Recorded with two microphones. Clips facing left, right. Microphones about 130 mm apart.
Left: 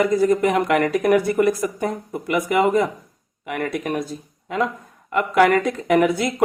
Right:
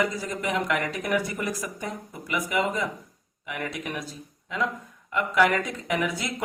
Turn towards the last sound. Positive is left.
turn(degrees=60)  # may be behind; listen again after turning